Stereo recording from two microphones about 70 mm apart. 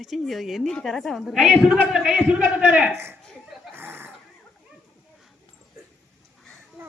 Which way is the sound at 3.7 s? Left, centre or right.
Right.